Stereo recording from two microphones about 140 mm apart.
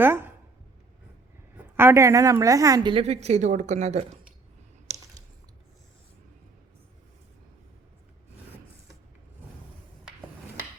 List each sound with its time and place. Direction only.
0.0 s a woman's voice: 15° right (ahead or behind)
1.7 s a woman's voice: 20° right (ahead or behind)
2.9 s speech: 50° right (ahead or behind)